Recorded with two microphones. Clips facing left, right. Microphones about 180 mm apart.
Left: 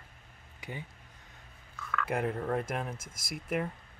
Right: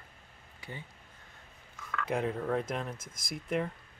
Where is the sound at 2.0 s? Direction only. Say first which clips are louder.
Right 1 dB; 5° left (ahead or behind).